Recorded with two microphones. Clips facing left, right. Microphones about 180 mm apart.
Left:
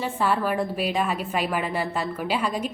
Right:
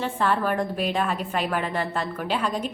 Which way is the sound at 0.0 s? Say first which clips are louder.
Even; 10° left (ahead or behind).